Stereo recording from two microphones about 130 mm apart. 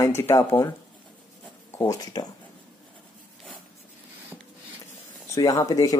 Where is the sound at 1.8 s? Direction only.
30° left (ahead or behind).